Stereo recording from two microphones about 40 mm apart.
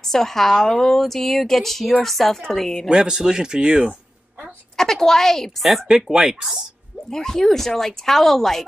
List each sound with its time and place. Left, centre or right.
0.0 s a woman's voice: centre
2.9 s speech: centre
4.7 s a woman's voice: centre
5.6 s a woman's voice: centre
5.9 s speech: centre
7.1 s a woman's voice: centre